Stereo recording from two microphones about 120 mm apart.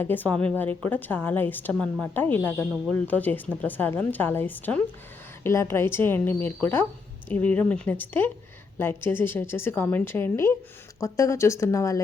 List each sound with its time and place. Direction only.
0.0 s a woman's voice: 15° left (ahead or behind)